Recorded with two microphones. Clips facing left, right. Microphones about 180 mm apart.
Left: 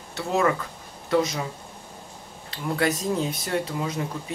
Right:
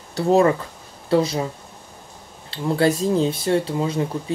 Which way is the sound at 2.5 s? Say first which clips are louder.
Right 6 dB; 30° right (ahead or behind).